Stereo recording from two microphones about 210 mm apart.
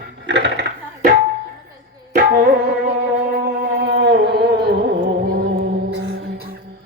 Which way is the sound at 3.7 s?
55° right (ahead or behind).